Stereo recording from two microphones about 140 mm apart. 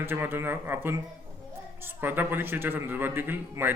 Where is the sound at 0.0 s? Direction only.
15° right (ahead or behind).